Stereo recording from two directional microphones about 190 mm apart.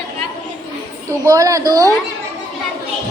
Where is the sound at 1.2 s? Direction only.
15° right (ahead or behind).